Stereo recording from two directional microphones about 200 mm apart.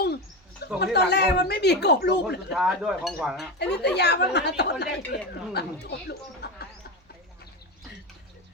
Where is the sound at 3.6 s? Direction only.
60° left (ahead or behind).